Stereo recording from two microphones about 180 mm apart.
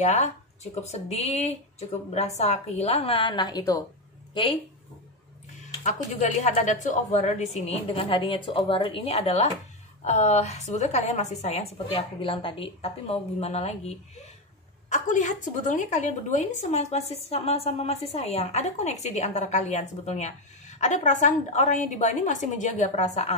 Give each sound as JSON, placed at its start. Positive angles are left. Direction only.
{"t": 0.0, "sound": "a woman's voice", "side_deg": 40}
{"t": 5.9, "sound": "a woman's voice", "side_deg": 40}